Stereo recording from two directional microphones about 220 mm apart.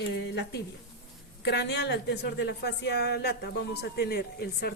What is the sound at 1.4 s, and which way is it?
A woman's voice, 50° left (ahead or behind).